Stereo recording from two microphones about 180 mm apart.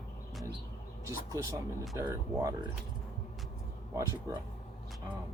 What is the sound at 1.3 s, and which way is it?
Speech, 15° right (ahead or behind).